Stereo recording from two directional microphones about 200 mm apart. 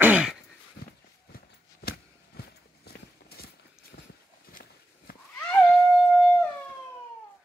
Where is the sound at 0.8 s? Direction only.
55° left (ahead or behind).